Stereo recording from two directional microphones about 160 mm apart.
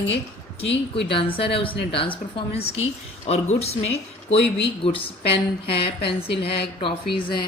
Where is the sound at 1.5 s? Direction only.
35° left (ahead or behind).